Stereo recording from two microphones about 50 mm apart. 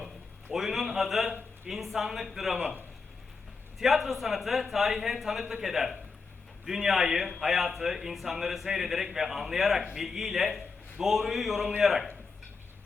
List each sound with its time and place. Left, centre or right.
0.5 s a man's voice: centre
2.6 s a man's voice: right
3.8 s a man's voice: centre